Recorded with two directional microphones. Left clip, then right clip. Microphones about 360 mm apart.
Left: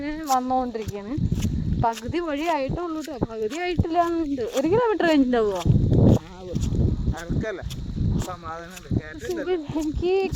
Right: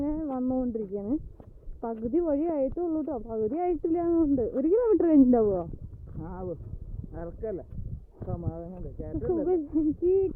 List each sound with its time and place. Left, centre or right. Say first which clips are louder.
0.0 s a sound: even; centre
0.3 s speech: left 7 dB; centre
9.3 s speech: left 1 dB; centre